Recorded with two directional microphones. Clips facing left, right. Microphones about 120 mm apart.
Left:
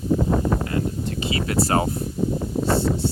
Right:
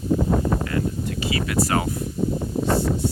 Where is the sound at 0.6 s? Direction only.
30° left (ahead or behind).